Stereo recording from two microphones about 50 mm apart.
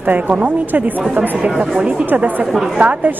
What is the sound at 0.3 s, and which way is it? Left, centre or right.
A woman's voice, right.